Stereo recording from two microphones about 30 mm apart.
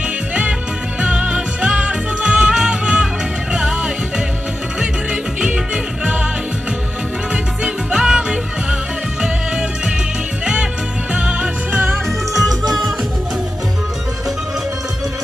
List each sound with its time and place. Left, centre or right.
1.0 s music: right
4.8 s music: right
7.9 s music: right
9.2 s music: right
11.7 s music: right
12.0 s music: centre